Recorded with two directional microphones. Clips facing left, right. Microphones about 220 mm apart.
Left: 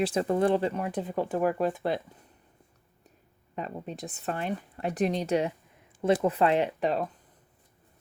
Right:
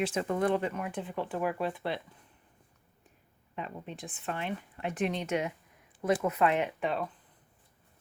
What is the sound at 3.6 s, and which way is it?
A woman's voice, 40° left (ahead or behind).